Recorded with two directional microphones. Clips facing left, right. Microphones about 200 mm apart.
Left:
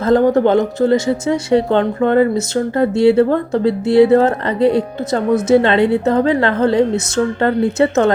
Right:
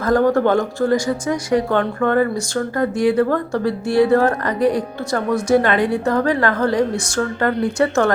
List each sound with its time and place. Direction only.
0.0 s speech: 20° left (ahead or behind)